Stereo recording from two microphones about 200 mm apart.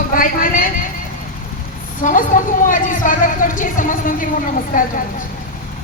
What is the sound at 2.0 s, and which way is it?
Speech, 40° left (ahead or behind).